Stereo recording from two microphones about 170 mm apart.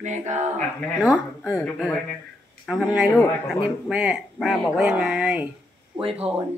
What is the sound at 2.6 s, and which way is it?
Speech, 5° right (ahead or behind).